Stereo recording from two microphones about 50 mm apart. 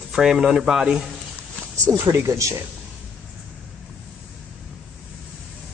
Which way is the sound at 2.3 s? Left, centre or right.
Right.